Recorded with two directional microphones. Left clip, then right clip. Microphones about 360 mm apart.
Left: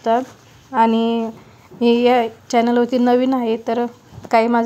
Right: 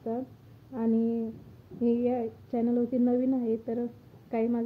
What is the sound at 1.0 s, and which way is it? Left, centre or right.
Speech, left.